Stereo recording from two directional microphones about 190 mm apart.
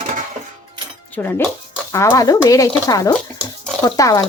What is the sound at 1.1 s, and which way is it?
Speech, 10° left (ahead or behind).